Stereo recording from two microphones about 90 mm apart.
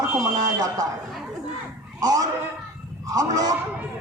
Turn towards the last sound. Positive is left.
turn(degrees=-40)  # may be behind; listen again after turning